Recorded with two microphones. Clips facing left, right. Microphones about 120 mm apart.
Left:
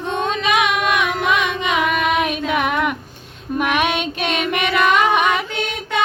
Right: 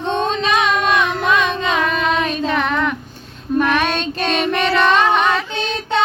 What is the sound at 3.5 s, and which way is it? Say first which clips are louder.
Female singing: right 2 dB; 10° left (ahead or behind).